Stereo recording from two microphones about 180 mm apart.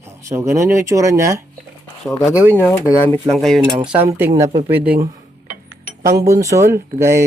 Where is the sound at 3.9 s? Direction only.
10° right (ahead or behind).